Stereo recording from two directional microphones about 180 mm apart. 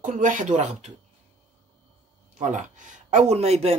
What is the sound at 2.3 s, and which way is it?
Speech, 45° right (ahead or behind).